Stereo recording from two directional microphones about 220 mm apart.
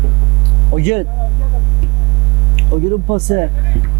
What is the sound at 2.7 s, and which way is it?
Speech, 25° right (ahead or behind).